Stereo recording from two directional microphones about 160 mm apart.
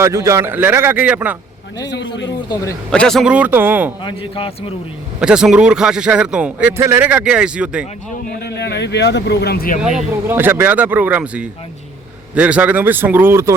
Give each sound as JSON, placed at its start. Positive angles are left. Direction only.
{"t": 0.0, "sound": "a man's voice", "side_deg": -20}
{"t": 2.2, "sound": "speech", "side_deg": 25}
{"t": 2.9, "sound": "a man's voice", "side_deg": 5}
{"t": 4.0, "sound": "speech", "side_deg": 35}
{"t": 5.2, "sound": "a man's voice", "side_deg": -5}
{"t": 8.3, "sound": "speech", "side_deg": 85}
{"t": 10.2, "sound": "a man's voice", "side_deg": -15}